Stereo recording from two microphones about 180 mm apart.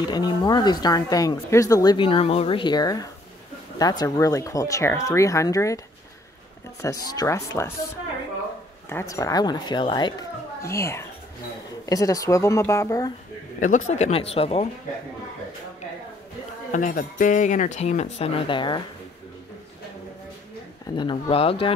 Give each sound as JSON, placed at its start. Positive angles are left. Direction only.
{"t": 0.1, "sound": "speech", "side_deg": 25}
{"t": 6.8, "sound": "speech", "side_deg": 20}
{"t": 8.8, "sound": "speech", "side_deg": 15}
{"t": 10.6, "sound": "speech", "side_deg": 15}
{"t": 13.6, "sound": "speech", "side_deg": 45}
{"t": 16.7, "sound": "speech", "side_deg": 45}
{"t": 20.9, "sound": "speech", "side_deg": 25}